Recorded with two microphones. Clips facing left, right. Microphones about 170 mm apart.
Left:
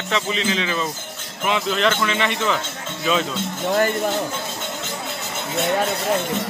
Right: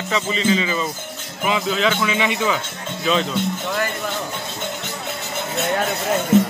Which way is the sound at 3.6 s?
35° left (ahead or behind).